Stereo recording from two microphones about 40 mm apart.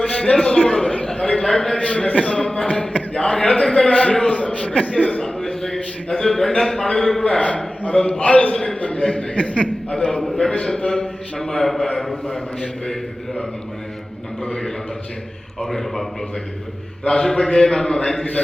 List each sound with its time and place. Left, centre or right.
0.1 s a sound: left
1.8 s a man's voice: left
2.3 s a sound: centre
3.8 s a man's voice: left
5.2 s a sound: centre
6.6 s a man's voice: centre
7.4 s a man's voice: left
7.9 s a man's voice: centre
8.2 s a man's voice: left
9.3 s a man's voice: left
10.1 s a man's voice: centre
14.4 s a man's voice: centre
17.1 s a man's voice: centre